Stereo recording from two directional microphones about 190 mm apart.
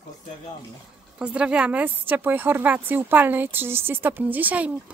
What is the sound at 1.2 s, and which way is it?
A woman's voice, 5° right (ahead or behind).